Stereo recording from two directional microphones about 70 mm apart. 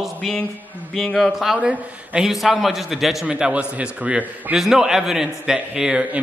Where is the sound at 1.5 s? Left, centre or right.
Centre.